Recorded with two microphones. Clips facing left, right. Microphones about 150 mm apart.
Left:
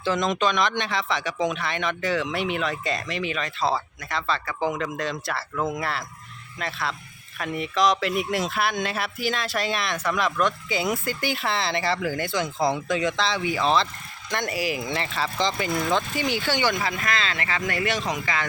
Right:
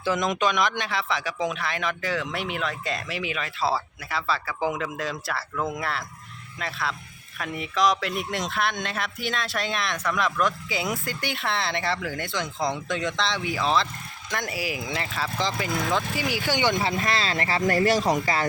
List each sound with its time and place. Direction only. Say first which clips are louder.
0.0 s speech: left 1 dB; 10° right (ahead or behind)
16.5 s speech: right 4 dB; 20° right (ahead or behind); by 18.4 s 40° right (ahead or behind)